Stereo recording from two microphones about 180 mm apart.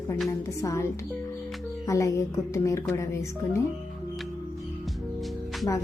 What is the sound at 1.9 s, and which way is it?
Speech, 15° left (ahead or behind).